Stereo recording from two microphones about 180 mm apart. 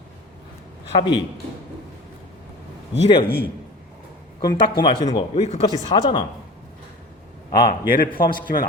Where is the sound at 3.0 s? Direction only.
30° left (ahead or behind).